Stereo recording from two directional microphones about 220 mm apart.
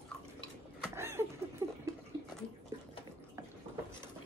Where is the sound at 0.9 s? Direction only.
10° right (ahead or behind).